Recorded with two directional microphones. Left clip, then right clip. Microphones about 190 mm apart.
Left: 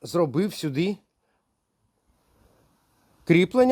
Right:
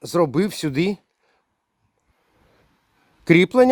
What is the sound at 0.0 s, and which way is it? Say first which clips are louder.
Speech: right 4 dB; 25° right (ahead or behind).